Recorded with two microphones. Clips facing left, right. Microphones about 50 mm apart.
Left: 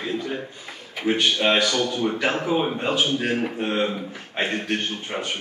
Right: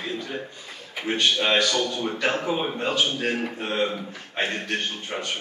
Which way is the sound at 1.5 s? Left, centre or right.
Centre.